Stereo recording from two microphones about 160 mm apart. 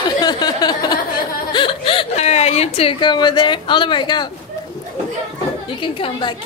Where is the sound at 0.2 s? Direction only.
25° left (ahead or behind).